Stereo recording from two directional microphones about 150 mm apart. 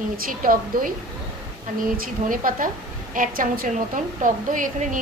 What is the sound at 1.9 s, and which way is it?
A woman's voice, 70° right (ahead or behind).